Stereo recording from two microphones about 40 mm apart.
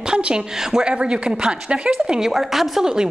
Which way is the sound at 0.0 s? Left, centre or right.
Right.